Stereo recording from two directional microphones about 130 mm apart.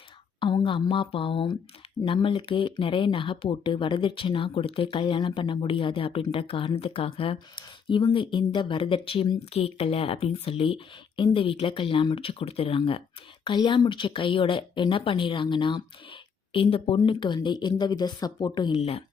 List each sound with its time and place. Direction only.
0.3 s speech: 40° left (ahead or behind)
18.8 s speech: 50° left (ahead or behind)